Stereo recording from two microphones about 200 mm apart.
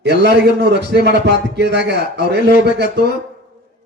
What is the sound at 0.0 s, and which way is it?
A man's voice, 55° right (ahead or behind).